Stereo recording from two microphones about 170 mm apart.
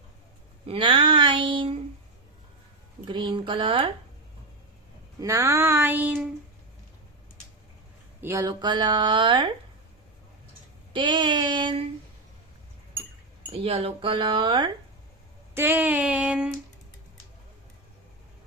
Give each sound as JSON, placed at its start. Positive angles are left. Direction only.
{"t": 0.6, "sound": "a sound", "side_deg": -30}
{"t": 3.1, "sound": "speech", "side_deg": -30}
{"t": 5.2, "sound": "female singing", "side_deg": -15}
{"t": 8.2, "sound": "speech", "side_deg": -15}
{"t": 10.9, "sound": "speech", "side_deg": -30}
{"t": 13.5, "sound": "speech", "side_deg": -35}
{"t": 15.5, "sound": "female singing", "side_deg": -10}